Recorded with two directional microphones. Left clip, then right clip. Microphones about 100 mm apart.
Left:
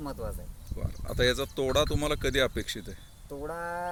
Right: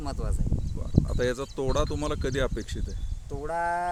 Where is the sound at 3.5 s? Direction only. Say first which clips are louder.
Right 8 dB; 45° right (ahead or behind).